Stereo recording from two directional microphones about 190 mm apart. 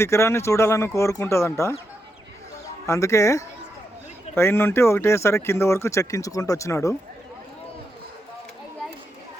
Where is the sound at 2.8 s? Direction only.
15° left (ahead or behind).